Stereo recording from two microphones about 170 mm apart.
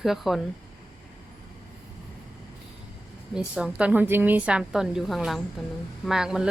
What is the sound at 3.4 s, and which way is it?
Speech, 5° right (ahead or behind).